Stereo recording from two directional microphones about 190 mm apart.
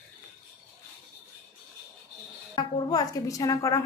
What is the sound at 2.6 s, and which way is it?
A woman's voice, 25° left (ahead or behind).